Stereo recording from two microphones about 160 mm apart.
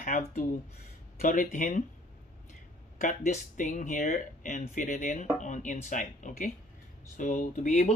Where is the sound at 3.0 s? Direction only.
50° left (ahead or behind).